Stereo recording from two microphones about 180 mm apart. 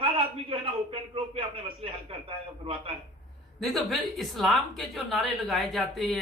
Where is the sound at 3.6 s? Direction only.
Centre (ahead or behind).